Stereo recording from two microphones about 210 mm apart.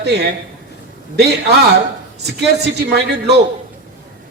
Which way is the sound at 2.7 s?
50° right (ahead or behind).